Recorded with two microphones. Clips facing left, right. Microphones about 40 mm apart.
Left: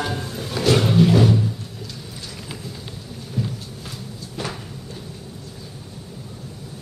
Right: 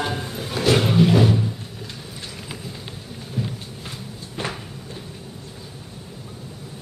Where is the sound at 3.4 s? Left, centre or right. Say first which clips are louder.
Left 1 dB; centre.